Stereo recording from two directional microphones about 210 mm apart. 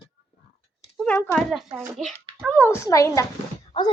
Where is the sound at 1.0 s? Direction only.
5° left (ahead or behind).